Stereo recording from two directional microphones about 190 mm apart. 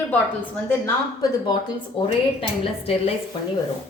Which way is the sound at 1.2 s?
25° left (ahead or behind).